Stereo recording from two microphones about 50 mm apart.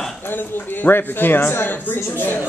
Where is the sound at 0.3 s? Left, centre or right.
Left.